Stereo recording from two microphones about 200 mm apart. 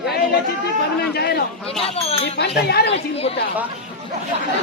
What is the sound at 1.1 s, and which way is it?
Speech, 55° left (ahead or behind).